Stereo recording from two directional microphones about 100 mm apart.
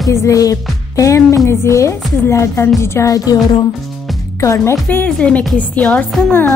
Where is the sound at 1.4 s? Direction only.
30° left (ahead or behind).